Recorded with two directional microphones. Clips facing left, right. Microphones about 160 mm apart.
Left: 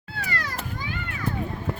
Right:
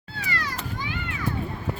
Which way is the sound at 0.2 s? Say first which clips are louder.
Even; 55° left (ahead or behind).